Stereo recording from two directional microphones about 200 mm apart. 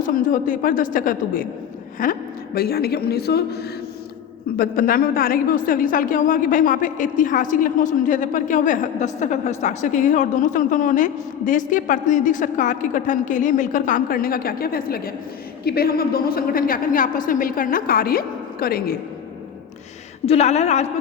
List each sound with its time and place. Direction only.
0.0 s a woman's voice: 40° left (ahead or behind)
20.2 s a woman's voice: 30° left (ahead or behind)